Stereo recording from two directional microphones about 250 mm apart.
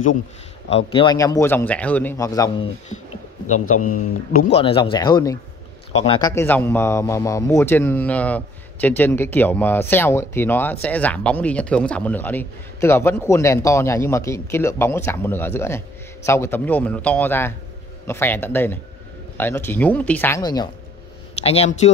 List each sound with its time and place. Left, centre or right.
0.7 s speech: left
3.7 s speech: left
4.5 s speech: left
21.5 s speech: left